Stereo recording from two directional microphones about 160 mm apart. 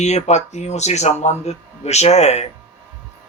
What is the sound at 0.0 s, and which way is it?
Speech, 45° left (ahead or behind).